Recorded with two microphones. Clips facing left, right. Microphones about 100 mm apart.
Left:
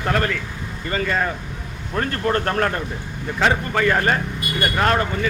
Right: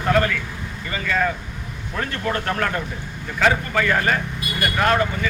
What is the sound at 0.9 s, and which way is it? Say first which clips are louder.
A man's voice: even; 35° left (ahead or behind).